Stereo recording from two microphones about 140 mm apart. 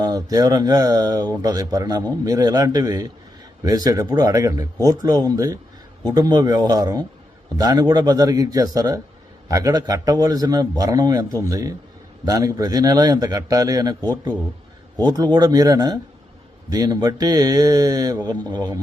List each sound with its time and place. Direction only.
0.0 s speech: 25° right (ahead or behind)
14.9 s speech: 25° right (ahead or behind)